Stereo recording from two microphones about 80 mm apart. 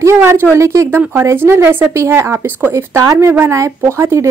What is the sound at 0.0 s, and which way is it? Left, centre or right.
A woman's voice, right.